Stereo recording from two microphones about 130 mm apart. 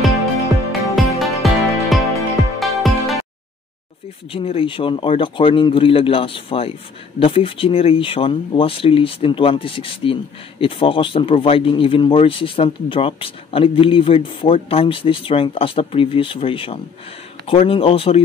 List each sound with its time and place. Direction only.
0.7 s music: centre (ahead or behind)
4.3 s speech: 45° left (ahead or behind)